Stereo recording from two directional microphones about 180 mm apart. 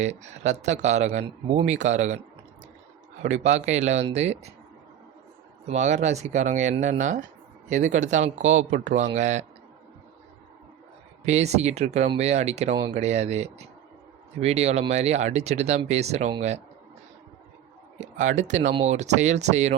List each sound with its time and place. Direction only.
0.0 s speech: 40° right (ahead or behind)
3.2 s speech: 40° right (ahead or behind)
5.6 s speech: 40° right (ahead or behind)
11.3 s speech: 40° right (ahead or behind)
17.9 s speech: 40° right (ahead or behind)